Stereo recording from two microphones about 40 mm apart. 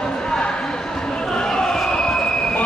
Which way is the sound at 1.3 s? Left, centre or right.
Centre.